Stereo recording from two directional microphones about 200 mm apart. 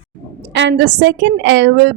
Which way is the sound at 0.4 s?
65° right (ahead or behind).